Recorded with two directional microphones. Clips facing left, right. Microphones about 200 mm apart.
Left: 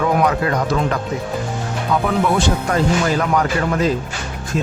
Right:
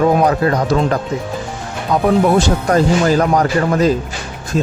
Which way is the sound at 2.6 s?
40° right (ahead or behind).